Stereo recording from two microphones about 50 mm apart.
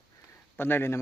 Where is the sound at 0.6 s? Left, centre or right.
Left.